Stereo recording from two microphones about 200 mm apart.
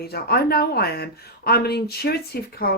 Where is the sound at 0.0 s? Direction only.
50° left (ahead or behind).